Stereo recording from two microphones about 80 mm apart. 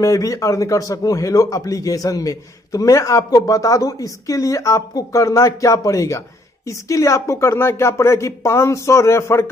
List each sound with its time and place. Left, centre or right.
0.0 s a man's voice: left